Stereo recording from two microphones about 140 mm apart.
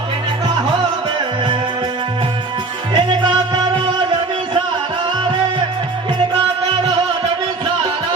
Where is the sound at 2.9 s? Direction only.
35° right (ahead or behind).